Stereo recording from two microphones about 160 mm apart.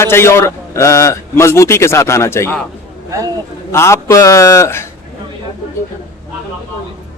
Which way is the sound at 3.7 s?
15° left (ahead or behind).